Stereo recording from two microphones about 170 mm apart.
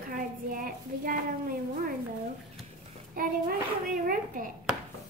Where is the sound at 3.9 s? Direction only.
55° right (ahead or behind).